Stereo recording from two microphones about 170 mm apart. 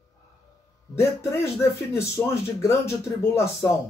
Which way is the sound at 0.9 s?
15° left (ahead or behind).